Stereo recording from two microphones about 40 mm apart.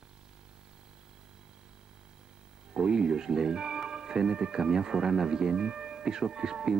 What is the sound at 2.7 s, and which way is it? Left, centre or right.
Music, centre.